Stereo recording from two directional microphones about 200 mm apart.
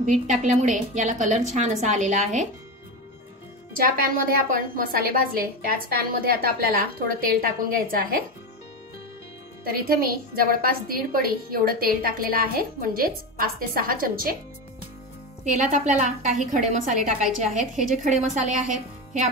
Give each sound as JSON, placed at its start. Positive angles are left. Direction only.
{"t": 0.0, "sound": "a woman's voice", "side_deg": -35}
{"t": 3.7, "sound": "a woman's voice", "side_deg": -45}
{"t": 9.7, "sound": "a woman's voice", "side_deg": -45}
{"t": 15.4, "sound": "a woman's voice", "side_deg": -35}